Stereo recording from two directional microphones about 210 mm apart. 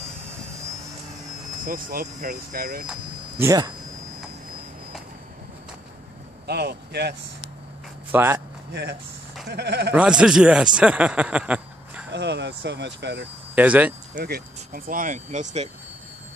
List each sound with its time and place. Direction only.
1.6 s speech: 40° right (ahead or behind)
2.9 s speech: 10° right (ahead or behind)
6.4 s speech: 50° right (ahead or behind)
8.1 s speech: 10° right (ahead or behind)
9.5 s speech: 50° right (ahead or behind)
9.9 s speech: 5° right (ahead or behind)
12.1 s speech: 55° right (ahead or behind)
13.6 s speech: 5° right (ahead or behind)
14.1 s speech: 45° right (ahead or behind)